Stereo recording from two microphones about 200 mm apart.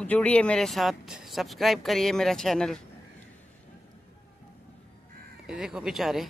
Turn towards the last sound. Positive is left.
turn(degrees=0)  # may be behind; listen again after turning